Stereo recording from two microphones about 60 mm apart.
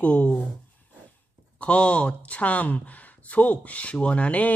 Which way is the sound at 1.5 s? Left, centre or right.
Left.